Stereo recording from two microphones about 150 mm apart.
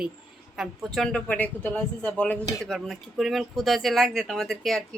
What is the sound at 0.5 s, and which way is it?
A woman's voice, centre (ahead or behind).